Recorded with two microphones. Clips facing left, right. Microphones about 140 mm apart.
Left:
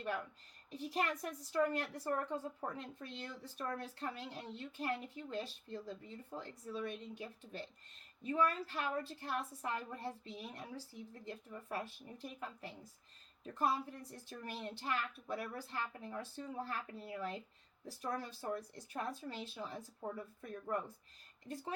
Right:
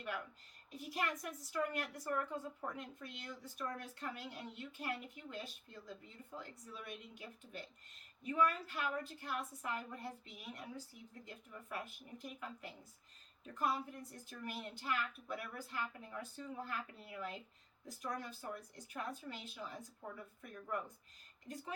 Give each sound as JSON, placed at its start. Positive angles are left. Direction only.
{"t": 0.7, "sound": "speech", "side_deg": 35}